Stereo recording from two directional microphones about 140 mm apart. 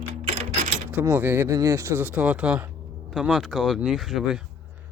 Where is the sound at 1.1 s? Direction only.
15° right (ahead or behind).